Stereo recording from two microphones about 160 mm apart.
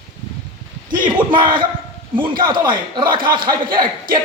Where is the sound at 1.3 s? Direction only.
30° right (ahead or behind).